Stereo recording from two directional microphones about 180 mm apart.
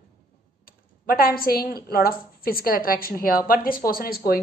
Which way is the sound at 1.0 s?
55° left (ahead or behind).